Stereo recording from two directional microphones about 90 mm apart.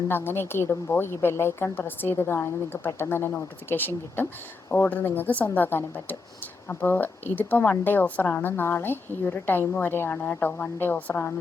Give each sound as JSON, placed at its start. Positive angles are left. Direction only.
{"t": 0.1, "sound": "a woman's voice", "side_deg": 25}